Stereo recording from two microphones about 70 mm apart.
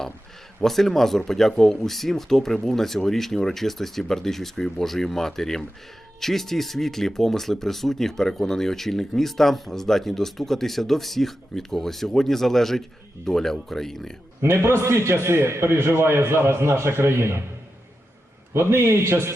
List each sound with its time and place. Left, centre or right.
0.6 s speech: centre
14.4 s a man's voice: right
18.5 s a man's voice: right